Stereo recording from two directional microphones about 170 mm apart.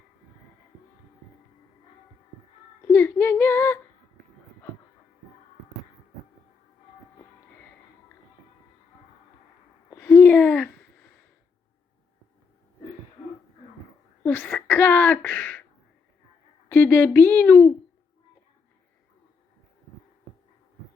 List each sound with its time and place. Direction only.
2.8 s speech: 15° left (ahead or behind)
9.9 s a sound: 15° left (ahead or behind)
14.3 s speech: 10° left (ahead or behind)
16.6 s speech: 10° left (ahead or behind)